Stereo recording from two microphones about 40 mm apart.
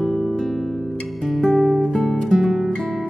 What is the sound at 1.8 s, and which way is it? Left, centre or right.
Music, centre.